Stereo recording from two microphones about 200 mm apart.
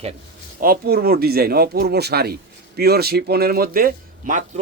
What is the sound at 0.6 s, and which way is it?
Speech, 45° right (ahead or behind).